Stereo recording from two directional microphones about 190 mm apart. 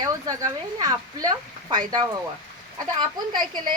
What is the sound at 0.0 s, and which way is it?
Speech, 20° right (ahead or behind).